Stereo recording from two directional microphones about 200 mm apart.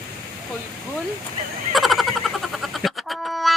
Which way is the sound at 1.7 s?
Centre (ahead or behind).